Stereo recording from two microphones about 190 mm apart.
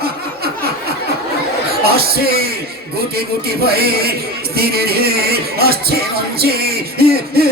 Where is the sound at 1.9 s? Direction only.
55° right (ahead or behind).